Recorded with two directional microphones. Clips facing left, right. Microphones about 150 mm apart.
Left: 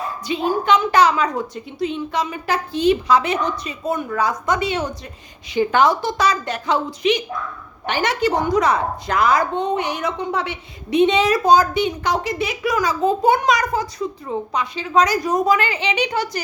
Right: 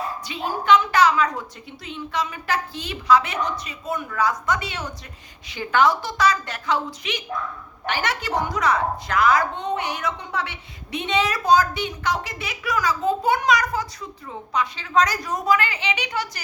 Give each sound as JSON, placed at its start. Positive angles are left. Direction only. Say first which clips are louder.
{"t": 0.3, "sound": "speech", "louder": "left 2 dB", "side_deg": 20}